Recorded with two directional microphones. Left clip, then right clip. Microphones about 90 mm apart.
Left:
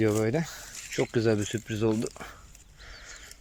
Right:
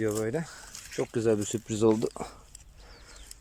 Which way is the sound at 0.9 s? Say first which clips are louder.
Left 1 dB; 20° right (ahead or behind).